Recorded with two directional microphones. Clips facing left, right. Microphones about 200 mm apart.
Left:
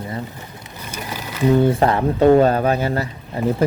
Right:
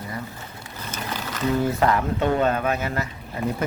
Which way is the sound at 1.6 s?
30° left (ahead or behind).